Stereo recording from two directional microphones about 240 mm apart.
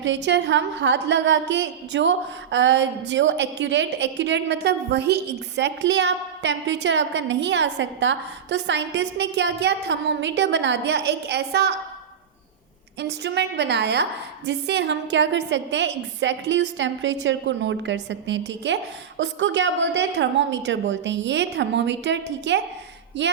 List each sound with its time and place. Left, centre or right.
0.0 s a woman's voice: right
13.0 s a woman's voice: right